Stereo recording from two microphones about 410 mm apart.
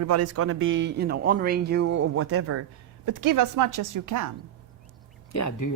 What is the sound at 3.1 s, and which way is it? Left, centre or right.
A woman's voice, right.